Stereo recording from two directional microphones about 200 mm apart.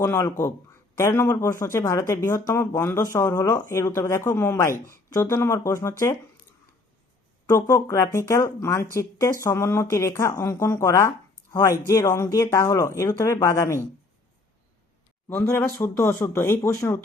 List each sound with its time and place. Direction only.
0.0 s speech: 15° left (ahead or behind)
7.4 s speech: 15° left (ahead or behind)
15.3 s speech: 10° left (ahead or behind)